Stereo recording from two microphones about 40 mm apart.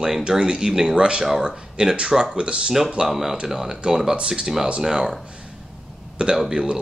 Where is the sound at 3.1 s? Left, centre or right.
Centre.